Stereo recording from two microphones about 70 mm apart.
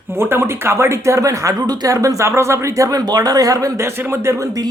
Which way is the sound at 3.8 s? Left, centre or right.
Right.